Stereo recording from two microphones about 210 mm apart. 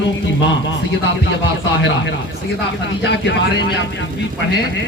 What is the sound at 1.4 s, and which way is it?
A man's voice, 60° left (ahead or behind).